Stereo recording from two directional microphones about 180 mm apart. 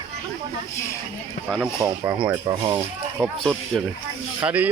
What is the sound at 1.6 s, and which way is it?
Speech, 15° right (ahead or behind).